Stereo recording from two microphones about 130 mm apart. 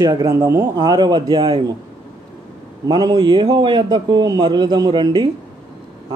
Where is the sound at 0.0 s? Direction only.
30° right (ahead or behind).